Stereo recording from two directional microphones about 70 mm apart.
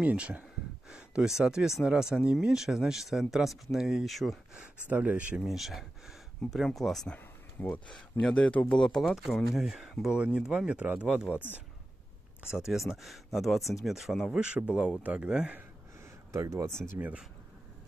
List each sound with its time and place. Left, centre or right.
0.0 s speech: centre
4.6 s speech: centre
5.4 s speech: centre
7.6 s speech: left
7.9 s speech: centre
8.5 s speech: centre
8.7 s speech: centre
9.0 s speech: centre
12.5 s speech: centre
14.4 s speech: centre
16.3 s speech: right